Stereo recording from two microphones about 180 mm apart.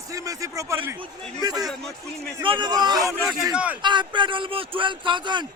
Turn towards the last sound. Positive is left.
turn(degrees=-25)  # may be behind; listen again after turning